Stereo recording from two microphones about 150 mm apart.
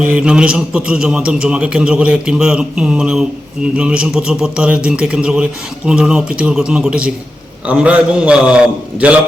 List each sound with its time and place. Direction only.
0.0 s speech: 5° right (ahead or behind)